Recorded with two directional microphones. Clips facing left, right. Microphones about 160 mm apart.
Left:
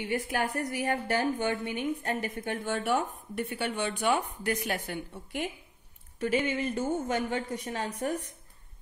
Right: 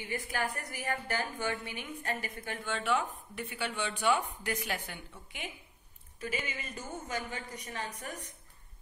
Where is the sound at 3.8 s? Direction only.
50° left (ahead or behind).